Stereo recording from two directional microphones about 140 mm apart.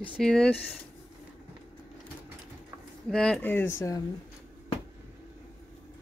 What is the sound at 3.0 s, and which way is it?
Speech, centre (ahead or behind).